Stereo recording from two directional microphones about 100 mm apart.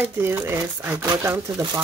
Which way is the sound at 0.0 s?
25° right (ahead or behind).